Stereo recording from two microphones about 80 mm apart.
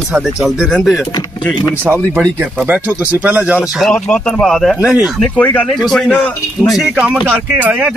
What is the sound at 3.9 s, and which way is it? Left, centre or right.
Speech, centre.